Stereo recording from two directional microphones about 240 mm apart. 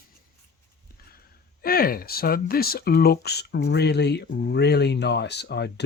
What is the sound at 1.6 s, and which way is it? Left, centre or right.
Speech, left.